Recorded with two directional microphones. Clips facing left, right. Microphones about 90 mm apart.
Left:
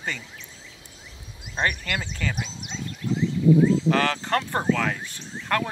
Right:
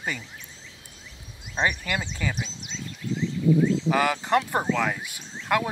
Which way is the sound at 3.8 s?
10° right (ahead or behind).